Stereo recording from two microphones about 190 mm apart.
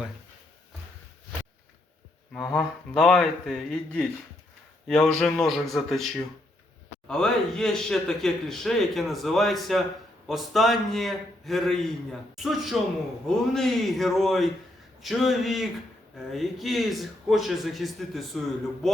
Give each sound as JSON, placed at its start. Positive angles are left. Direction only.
{"t": 2.3, "sound": "speech", "side_deg": 5}